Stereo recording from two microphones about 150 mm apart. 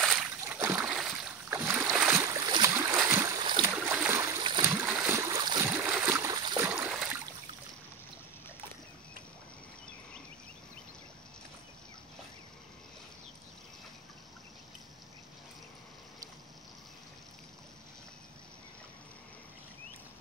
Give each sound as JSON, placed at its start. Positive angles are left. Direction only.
{"t": 0.5, "sound": "boat", "side_deg": -20}
{"t": 0.7, "sound": "boat", "side_deg": -5}
{"t": 1.5, "sound": "boat", "side_deg": -15}
{"t": 3.3, "sound": "boat", "side_deg": -30}
{"t": 3.6, "sound": "boat", "side_deg": -10}
{"t": 4.4, "sound": "a sound", "side_deg": -30}
{"t": 4.6, "sound": "boat", "side_deg": -15}
{"t": 5.7, "sound": "boat", "side_deg": -10}
{"t": 6.7, "sound": "a sound", "side_deg": -5}